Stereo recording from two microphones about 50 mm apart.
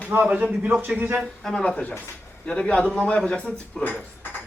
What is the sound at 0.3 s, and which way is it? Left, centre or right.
Speech, right.